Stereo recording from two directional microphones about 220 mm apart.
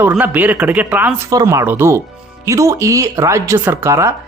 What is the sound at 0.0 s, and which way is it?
Speech, 10° right (ahead or behind).